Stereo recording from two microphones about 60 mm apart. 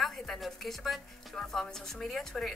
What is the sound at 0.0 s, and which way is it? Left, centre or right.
Speech, centre.